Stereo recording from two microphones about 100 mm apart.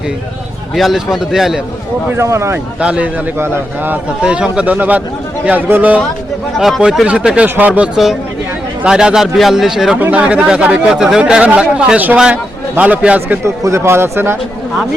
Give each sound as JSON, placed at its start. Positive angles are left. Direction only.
{"t": 0.8, "sound": "speech", "side_deg": -5}
{"t": 2.1, "sound": "speech", "side_deg": -30}
{"t": 2.8, "sound": "speech", "side_deg": -10}
{"t": 3.3, "sound": "speech", "side_deg": -25}
{"t": 4.2, "sound": "speech", "side_deg": -10}
{"t": 6.6, "sound": "speech", "side_deg": -5}
{"t": 13.2, "sound": "speech", "side_deg": -25}